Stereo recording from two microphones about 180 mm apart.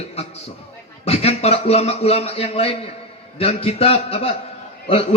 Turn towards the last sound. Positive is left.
turn(degrees=35)  # may be behind; listen again after turning